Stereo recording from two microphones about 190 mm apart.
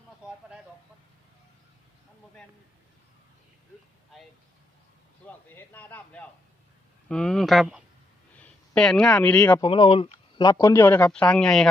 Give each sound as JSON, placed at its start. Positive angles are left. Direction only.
{"t": 4.1, "sound": "vehicle", "side_deg": 0}
{"t": 5.2, "sound": "a man's voice", "side_deg": 10}
{"t": 9.6, "sound": "speech", "side_deg": 25}